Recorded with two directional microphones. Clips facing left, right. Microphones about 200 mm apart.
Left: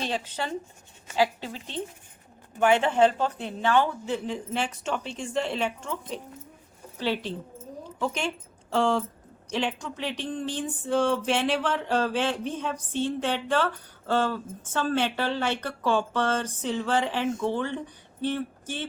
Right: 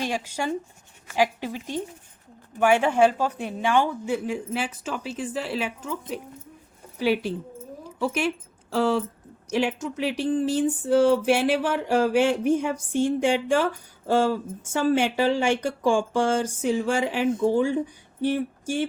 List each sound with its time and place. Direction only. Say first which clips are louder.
0.0 s speech: right 3 dB; 10° right (ahead or behind)
17.4 s speech: right 8 dB; 40° right (ahead or behind)
18.2 s female singing: right 4 dB; 10° right (ahead or behind)